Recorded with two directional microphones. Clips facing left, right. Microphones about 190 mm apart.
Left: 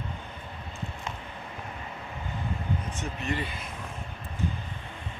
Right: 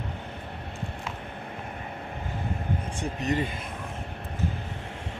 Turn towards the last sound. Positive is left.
turn(degrees=-40)  # may be behind; listen again after turning